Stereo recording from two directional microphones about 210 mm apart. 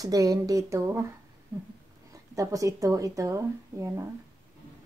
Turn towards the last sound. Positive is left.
turn(degrees=-15)  # may be behind; listen again after turning